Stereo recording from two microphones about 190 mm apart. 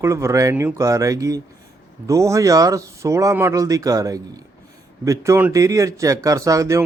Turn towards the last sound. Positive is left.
turn(degrees=-15)  # may be behind; listen again after turning